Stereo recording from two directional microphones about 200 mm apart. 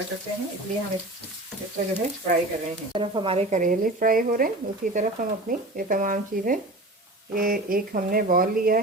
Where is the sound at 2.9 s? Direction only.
25° right (ahead or behind).